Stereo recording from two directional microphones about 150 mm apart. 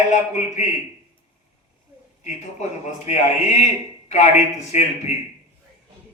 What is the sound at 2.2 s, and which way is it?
A man's voice, 50° left (ahead or behind).